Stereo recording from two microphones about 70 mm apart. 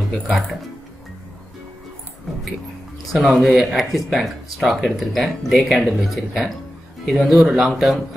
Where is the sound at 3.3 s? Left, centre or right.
Centre.